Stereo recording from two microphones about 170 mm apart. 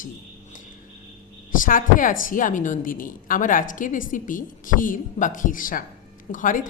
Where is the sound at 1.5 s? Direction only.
55° left (ahead or behind).